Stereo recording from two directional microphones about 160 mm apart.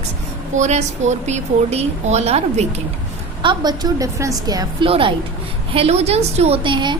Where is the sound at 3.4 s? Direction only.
30° right (ahead or behind).